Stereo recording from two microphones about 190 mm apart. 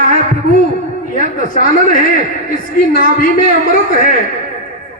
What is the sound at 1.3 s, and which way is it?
A woman's voice, 45° left (ahead or behind).